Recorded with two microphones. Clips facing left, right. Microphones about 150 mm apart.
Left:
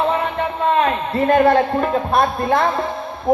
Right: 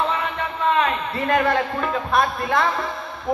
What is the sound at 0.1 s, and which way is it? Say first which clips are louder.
A man's voice: left 5 dB; 30° left (ahead or behind).